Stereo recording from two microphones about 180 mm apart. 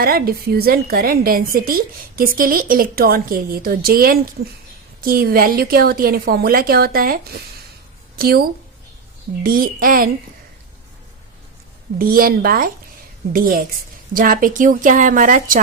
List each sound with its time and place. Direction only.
0.0 s a woman's voice: 55° right (ahead or behind)
11.9 s a woman's voice: 55° right (ahead or behind)